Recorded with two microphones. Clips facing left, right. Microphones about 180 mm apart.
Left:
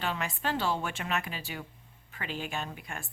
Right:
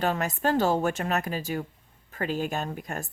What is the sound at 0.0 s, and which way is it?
A woman's voice, 45° right (ahead or behind).